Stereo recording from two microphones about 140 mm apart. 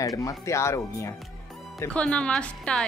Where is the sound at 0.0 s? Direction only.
25° left (ahead or behind).